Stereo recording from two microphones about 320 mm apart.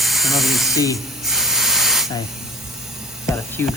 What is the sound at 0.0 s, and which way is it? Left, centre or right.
Hiss, centre.